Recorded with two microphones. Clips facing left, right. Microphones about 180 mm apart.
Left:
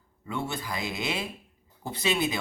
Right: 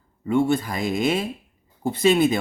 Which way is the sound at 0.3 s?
50° right (ahead or behind).